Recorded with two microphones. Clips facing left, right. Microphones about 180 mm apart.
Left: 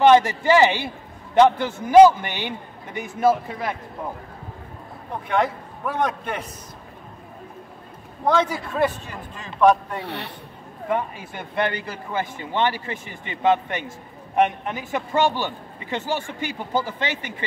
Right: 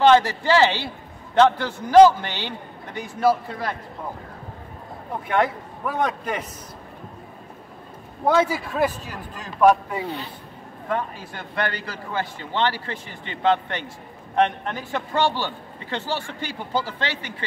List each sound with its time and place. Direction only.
0.0 s a man's voice: 15° left (ahead or behind)
5.3 s a man's voice: centre (ahead or behind)
8.3 s a man's voice: 5° right (ahead or behind)
10.0 s speech: 70° left (ahead or behind)
10.9 s a man's voice: 15° left (ahead or behind)
16.2 s speech: 50° left (ahead or behind)